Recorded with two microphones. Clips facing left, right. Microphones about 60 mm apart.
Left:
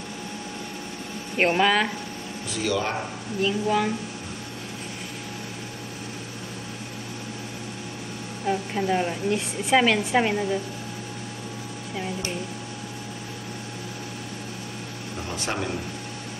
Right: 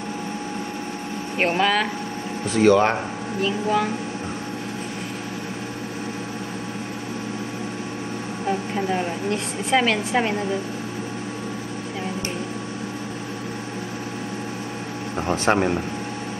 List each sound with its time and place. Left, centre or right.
1.4 s a woman's voice: centre
2.5 s speech: right
3.4 s a woman's voice: centre
8.5 s a woman's voice: centre
15.1 s speech: right